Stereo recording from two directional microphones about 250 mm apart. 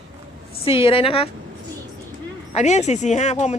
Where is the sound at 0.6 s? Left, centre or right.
Left.